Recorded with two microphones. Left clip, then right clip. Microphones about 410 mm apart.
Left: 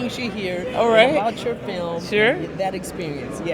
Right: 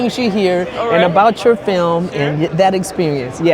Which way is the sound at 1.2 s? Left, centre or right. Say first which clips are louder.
Right 12 dB; right.